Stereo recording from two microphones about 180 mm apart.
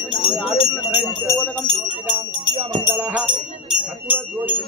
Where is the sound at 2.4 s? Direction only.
30° right (ahead or behind).